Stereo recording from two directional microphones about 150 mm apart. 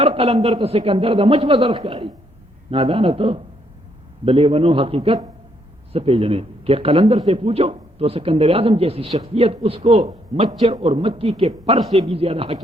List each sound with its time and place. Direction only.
0.0 s speech: 40° right (ahead or behind)
0.3 s speech: 25° right (ahead or behind)
0.6 s a man's voice: 40° right (ahead or behind)
1.4 s speech: 25° right (ahead or behind)
1.9 s a man's voice: 35° right (ahead or behind)